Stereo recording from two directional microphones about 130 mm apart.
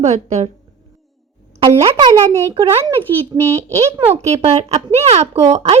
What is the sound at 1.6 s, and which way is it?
Speech, 40° right (ahead or behind).